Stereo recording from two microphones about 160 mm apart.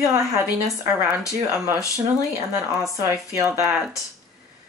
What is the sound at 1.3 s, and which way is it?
Speech, 20° right (ahead or behind).